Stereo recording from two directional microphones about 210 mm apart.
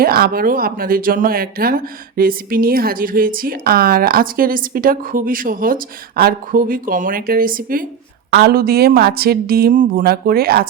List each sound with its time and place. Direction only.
0.0 s speech: 45° right (ahead or behind)